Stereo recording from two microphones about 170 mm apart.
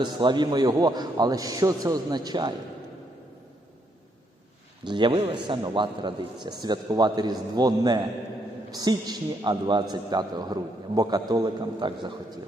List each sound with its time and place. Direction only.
0.0 s a man's voice: 25° right (ahead or behind)
4.8 s a man's voice: 25° right (ahead or behind)